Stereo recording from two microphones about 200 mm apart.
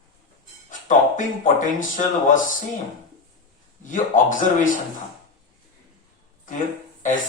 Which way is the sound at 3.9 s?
40° left (ahead or behind).